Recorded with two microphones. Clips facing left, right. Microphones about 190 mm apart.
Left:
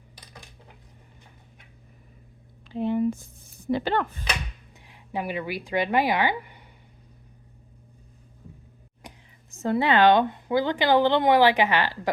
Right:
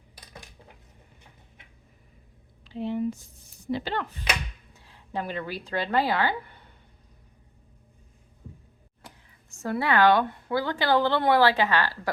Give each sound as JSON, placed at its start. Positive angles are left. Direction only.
{"t": 2.6, "sound": "a sound", "side_deg": 50}
{"t": 3.7, "sound": "speech", "side_deg": 55}
{"t": 4.7, "sound": "speech", "side_deg": 15}
{"t": 9.0, "sound": "speech", "side_deg": 20}